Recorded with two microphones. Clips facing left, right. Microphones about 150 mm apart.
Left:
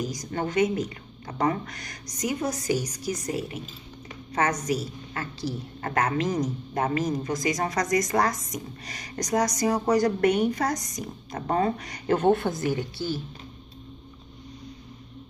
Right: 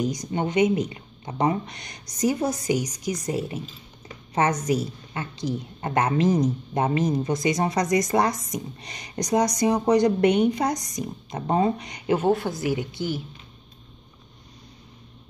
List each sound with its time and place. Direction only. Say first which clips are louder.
0.1 s a woman's voice: right 3 dB; 20° right (ahead or behind)
12.2 s a woman's voice: left 3 dB; 5° right (ahead or behind)